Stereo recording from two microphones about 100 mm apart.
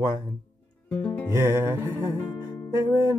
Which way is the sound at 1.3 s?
25° right (ahead or behind).